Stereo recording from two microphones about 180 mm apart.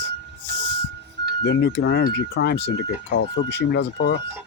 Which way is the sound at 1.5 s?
65° left (ahead or behind).